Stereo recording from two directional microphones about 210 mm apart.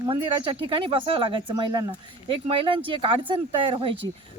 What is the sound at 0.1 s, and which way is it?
Speech, 25° right (ahead or behind).